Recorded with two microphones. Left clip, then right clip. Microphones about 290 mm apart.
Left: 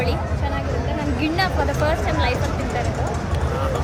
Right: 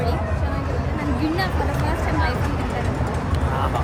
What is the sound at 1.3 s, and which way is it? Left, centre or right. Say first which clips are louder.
Speech: left 3 dB; centre.